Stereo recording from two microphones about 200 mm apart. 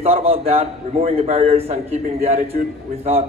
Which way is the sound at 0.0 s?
30° right (ahead or behind).